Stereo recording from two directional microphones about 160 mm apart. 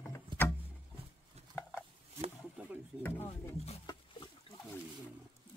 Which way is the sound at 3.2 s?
40° left (ahead or behind).